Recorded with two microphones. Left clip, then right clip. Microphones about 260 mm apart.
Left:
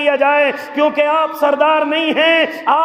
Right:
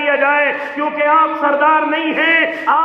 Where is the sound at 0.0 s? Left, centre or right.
Left.